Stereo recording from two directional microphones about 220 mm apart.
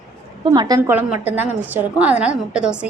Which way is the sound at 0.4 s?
20° right (ahead or behind).